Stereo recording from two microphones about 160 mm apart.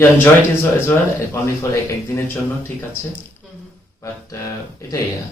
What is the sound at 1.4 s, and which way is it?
Speech, 20° left (ahead or behind).